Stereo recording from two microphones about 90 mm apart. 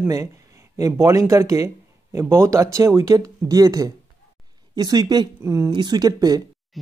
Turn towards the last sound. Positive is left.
turn(degrees=-45)  # may be behind; listen again after turning